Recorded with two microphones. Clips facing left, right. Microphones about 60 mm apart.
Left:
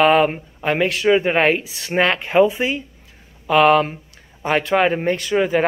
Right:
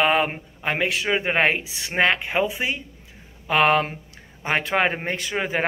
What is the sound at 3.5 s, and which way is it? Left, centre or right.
Speech, right.